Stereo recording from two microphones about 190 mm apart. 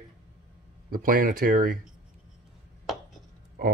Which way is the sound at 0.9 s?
50° right (ahead or behind).